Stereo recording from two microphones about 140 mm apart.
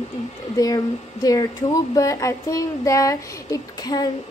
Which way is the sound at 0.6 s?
25° left (ahead or behind).